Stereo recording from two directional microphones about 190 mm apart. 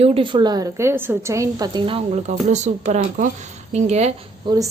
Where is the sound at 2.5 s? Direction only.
40° right (ahead or behind).